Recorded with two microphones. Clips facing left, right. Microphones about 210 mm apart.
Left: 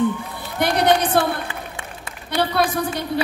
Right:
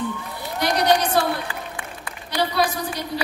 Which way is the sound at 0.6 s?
55° left (ahead or behind).